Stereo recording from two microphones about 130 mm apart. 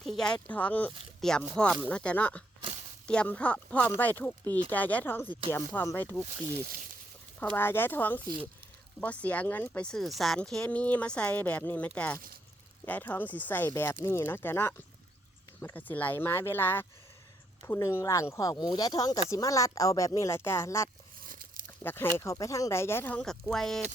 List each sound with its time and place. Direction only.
0.0 s speech: 5° left (ahead or behind)
7.3 s speech: 15° left (ahead or behind)
18.0 s speech: 25° left (ahead or behind)
21.2 s a sound: 90° right
21.8 s speech: 20° left (ahead or behind)
23.2 s speech: 5° left (ahead or behind)